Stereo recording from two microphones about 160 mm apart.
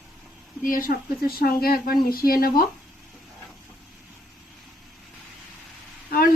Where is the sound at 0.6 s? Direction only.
60° left (ahead or behind).